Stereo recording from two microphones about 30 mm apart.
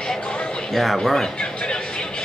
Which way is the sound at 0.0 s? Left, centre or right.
Left.